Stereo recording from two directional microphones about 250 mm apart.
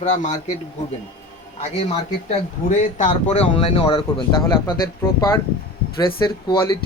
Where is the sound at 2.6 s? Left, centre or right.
Left.